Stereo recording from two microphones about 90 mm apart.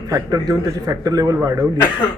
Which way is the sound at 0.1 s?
45° right (ahead or behind).